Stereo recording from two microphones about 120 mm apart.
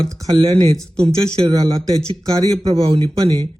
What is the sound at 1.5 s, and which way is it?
Speech, 30° right (ahead or behind).